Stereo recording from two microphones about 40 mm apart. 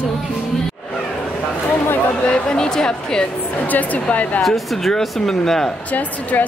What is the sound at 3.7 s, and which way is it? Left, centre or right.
Speech, left.